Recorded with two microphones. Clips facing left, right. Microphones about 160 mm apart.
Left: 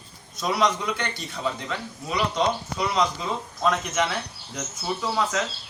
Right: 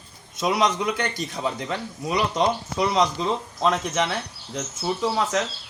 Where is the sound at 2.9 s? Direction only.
30° right (ahead or behind).